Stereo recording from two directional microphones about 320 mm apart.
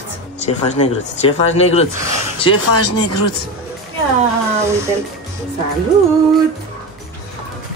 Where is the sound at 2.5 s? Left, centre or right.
Left.